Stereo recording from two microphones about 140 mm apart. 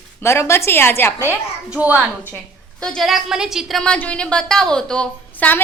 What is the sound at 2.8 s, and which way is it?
A woman's voice, 5° left (ahead or behind).